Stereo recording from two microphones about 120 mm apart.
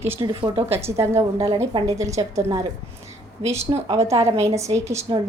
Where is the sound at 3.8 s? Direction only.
25° right (ahead or behind).